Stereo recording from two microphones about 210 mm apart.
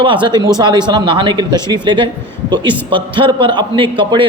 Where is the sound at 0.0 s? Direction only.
25° right (ahead or behind).